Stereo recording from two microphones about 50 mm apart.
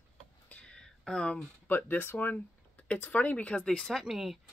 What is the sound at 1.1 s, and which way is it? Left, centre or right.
Speech, centre.